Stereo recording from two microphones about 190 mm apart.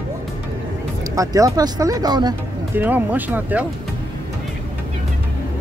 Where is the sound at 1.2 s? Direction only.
15° right (ahead or behind).